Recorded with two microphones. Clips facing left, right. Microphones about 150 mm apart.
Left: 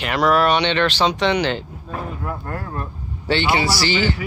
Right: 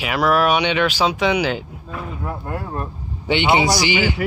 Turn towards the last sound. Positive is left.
turn(degrees=-15)  # may be behind; listen again after turning